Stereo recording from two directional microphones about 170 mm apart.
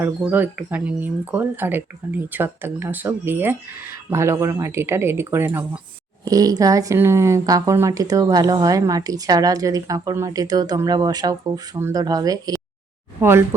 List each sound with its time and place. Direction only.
0.0 s speech: 10° right (ahead or behind)